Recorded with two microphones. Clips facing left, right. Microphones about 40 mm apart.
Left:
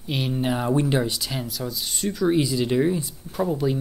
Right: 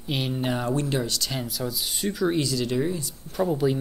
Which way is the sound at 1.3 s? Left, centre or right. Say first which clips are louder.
Even; centre.